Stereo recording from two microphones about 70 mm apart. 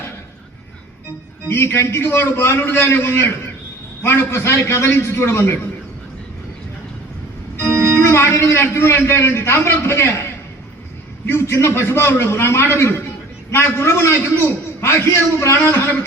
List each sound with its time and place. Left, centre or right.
1.5 s a man's voice: left
7.6 s a man's voice: left